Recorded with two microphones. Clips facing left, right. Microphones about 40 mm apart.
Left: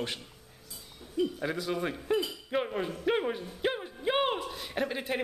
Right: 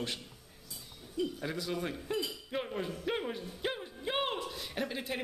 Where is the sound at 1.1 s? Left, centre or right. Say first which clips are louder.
Left 5 dB; centre.